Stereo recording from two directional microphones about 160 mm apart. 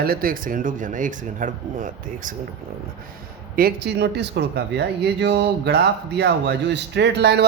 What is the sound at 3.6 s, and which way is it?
Speech, 80° right.